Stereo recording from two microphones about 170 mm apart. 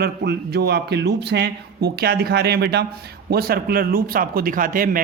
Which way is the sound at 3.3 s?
60° right (ahead or behind).